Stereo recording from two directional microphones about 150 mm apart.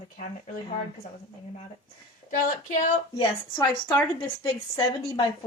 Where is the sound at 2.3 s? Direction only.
60° left (ahead or behind).